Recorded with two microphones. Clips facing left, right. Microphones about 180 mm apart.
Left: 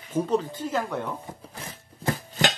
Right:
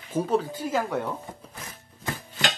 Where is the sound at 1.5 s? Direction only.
30° left (ahead or behind).